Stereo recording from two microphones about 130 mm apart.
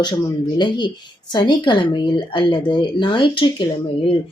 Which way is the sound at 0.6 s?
35° left (ahead or behind).